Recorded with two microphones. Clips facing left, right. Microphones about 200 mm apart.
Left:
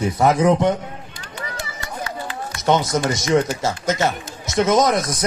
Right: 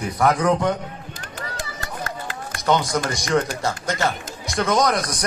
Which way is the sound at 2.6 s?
20° left (ahead or behind).